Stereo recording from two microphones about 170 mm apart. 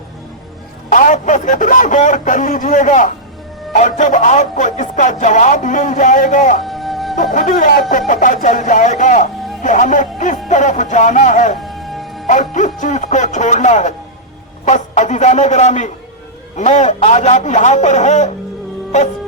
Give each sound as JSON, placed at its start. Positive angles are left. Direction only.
{"t": 0.9, "sound": "speech", "side_deg": 50}
{"t": 6.7, "sound": "music", "side_deg": 0}
{"t": 7.2, "sound": "speech", "side_deg": 50}
{"t": 11.6, "sound": "music", "side_deg": 0}
{"t": 12.3, "sound": "speech", "side_deg": 45}